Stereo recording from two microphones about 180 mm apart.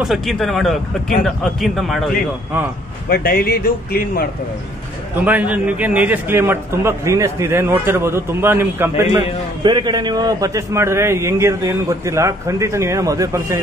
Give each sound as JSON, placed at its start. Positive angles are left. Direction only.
{"t": 0.0, "sound": "a man's voice", "side_deg": 0}
{"t": 3.1, "sound": "speech", "side_deg": 60}
{"t": 5.2, "sound": "a man's voice", "side_deg": -10}
{"t": 9.6, "sound": "a man's voice", "side_deg": -25}